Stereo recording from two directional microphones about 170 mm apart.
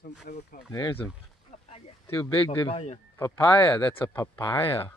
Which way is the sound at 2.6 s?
35° left (ahead or behind).